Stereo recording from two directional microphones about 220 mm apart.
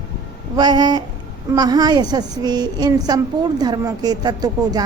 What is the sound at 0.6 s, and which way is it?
A woman's voice, 20° right (ahead or behind).